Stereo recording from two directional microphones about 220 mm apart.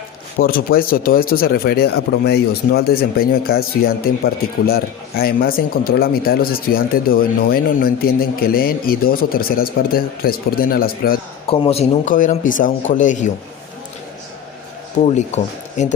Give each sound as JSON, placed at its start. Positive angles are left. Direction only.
{"t": 0.3, "sound": "speech", "side_deg": 40}
{"t": 11.6, "sound": "a man's voice", "side_deg": 30}